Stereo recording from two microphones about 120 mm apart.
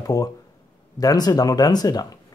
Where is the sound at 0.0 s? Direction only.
30° left (ahead or behind).